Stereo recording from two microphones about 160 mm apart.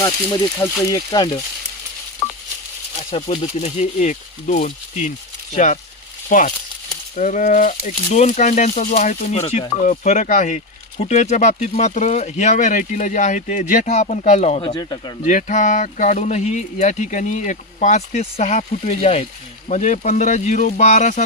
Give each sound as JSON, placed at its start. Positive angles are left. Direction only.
{"t": 0.6, "sound": "speech", "side_deg": 20}
{"t": 2.2, "sound": "telephone dialing", "side_deg": 10}
{"t": 3.1, "sound": "speech", "side_deg": 40}
{"t": 14.8, "sound": "speech", "side_deg": 25}
{"t": 15.2, "sound": "speech", "side_deg": 50}